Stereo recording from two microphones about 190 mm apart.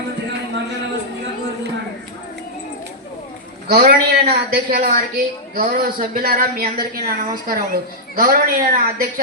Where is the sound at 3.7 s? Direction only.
50° right (ahead or behind).